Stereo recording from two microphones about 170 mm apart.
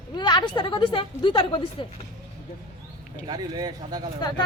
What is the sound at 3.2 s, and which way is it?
Speech, 25° right (ahead or behind).